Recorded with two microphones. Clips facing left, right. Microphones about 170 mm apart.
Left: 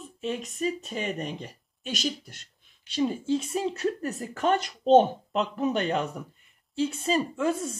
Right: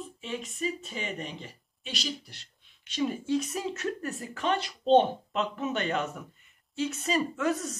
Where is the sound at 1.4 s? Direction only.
45° left (ahead or behind).